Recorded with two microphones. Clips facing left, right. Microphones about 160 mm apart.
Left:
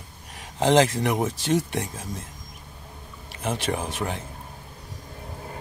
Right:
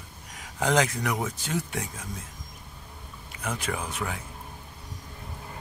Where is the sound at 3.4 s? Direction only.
25° left (ahead or behind).